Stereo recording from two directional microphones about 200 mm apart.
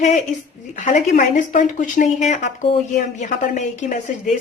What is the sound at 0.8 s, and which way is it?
A woman's voice, 40° left (ahead or behind).